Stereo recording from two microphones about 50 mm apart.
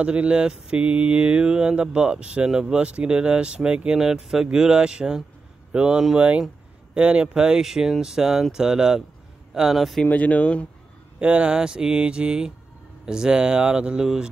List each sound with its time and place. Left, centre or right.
0.0 s mantra: right
6.9 s speech: right; by 9.9 s centre
10.0 s speech: left
11.1 s speech: right